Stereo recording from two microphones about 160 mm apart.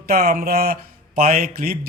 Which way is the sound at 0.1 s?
70° right (ahead or behind).